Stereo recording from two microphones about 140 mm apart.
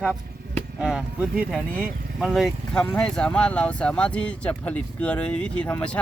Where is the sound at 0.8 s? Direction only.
5° right (ahead or behind).